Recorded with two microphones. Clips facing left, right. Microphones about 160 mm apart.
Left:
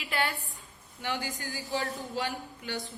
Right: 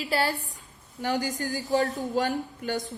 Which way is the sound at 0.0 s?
35° right (ahead or behind).